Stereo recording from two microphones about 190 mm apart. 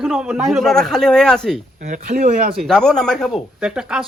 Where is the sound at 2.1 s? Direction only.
50° right (ahead or behind).